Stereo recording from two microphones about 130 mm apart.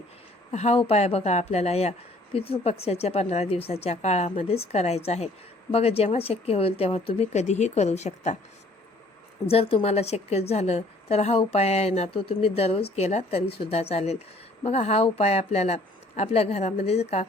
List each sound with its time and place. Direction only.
0.5 s speech: 55° left (ahead or behind)
9.5 s speech: 45° left (ahead or behind)